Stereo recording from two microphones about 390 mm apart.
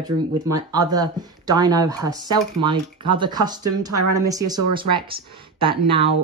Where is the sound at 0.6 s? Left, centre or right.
Centre.